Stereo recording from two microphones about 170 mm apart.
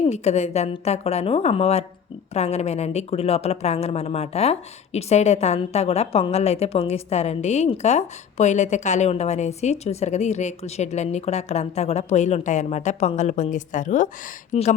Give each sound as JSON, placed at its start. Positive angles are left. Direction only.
{"t": 0.1, "sound": "a woman's voice", "side_deg": 40}